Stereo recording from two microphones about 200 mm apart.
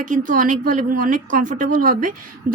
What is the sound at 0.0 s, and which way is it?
Speech, 40° right (ahead or behind).